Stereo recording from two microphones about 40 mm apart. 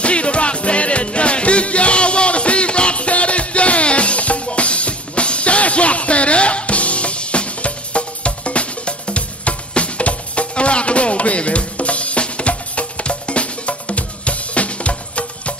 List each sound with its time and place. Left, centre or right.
0.0 s music: left